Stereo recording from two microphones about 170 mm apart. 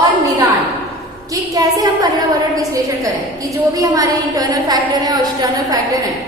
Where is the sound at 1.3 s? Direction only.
20° right (ahead or behind).